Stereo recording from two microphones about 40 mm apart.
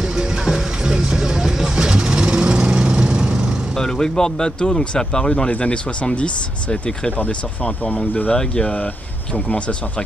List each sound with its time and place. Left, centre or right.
0.0 s vehicle: centre
3.7 s speech: centre; by 7.9 s left
7.9 s speech: left
8.3 s speech: left